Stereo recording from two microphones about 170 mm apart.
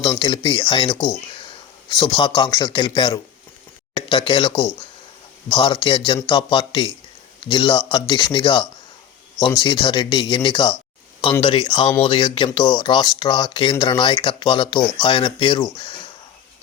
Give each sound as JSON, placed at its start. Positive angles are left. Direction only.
{"t": 0.2, "sound": "a man's voice", "side_deg": 30}